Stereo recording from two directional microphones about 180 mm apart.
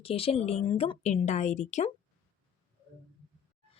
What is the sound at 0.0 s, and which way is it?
A woman's voice, 30° left (ahead or behind).